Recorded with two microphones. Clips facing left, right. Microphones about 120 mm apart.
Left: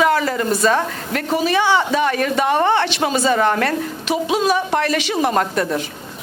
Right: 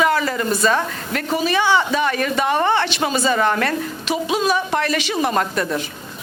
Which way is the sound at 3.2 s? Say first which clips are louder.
Left 2 dB; 45° left (ahead or behind).